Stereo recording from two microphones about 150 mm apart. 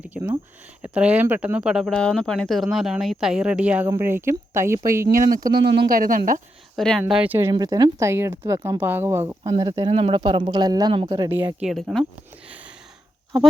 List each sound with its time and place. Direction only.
0.1 s a sound: 10° right (ahead or behind)
0.8 s speech: 10° right (ahead or behind)
1.9 s speech: 5° left (ahead or behind); by 5.0 s 20° right (ahead or behind)
5.1 s speech: 70° right (ahead or behind)
6.7 s speech: centre (ahead or behind)
7.1 s speech: 10° right (ahead or behind)
7.5 s speech: 25° right (ahead or behind)
9.9 s a woman's voice: 35° right (ahead or behind)
11.3 s speech: 15° right (ahead or behind)
11.7 s speech: centre (ahead or behind)